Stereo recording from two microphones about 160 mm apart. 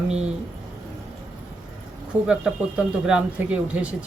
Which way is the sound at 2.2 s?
5° right (ahead or behind).